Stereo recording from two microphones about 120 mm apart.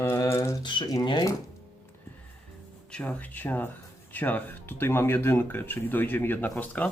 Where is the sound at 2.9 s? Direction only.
10° left (ahead or behind).